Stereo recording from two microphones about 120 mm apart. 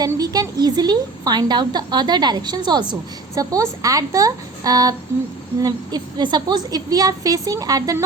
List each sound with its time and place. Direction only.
0.1 s a woman's voice: 30° right (ahead or behind)